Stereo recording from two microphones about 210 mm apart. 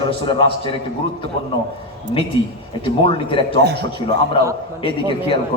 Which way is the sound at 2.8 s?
25° left (ahead or behind).